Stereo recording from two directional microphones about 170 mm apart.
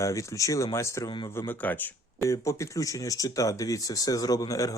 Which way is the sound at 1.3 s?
10° left (ahead or behind).